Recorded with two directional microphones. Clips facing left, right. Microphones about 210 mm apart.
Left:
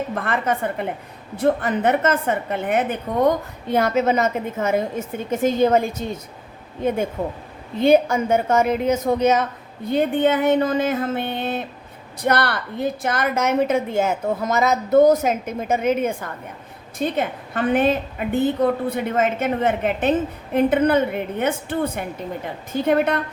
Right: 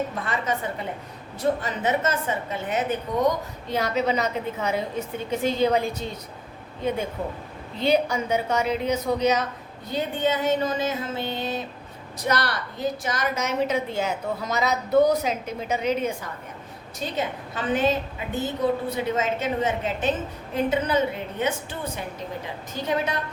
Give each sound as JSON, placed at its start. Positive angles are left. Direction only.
{"t": 0.1, "sound": "a woman's voice", "side_deg": 55}
{"t": 7.8, "sound": "a woman's voice", "side_deg": 50}